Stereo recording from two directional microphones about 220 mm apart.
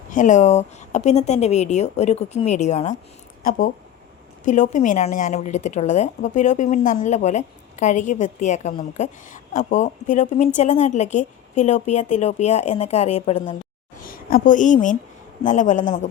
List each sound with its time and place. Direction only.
0.1 s a woman's voice: 35° left (ahead or behind)
14.0 s a woman's voice: 40° left (ahead or behind)